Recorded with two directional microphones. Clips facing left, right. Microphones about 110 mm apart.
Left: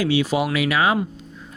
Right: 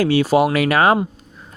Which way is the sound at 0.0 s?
45° right (ahead or behind).